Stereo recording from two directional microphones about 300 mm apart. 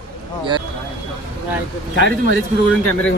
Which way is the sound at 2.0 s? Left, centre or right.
Right.